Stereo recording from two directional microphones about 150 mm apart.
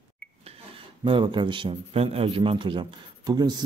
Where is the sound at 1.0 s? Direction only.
30° right (ahead or behind).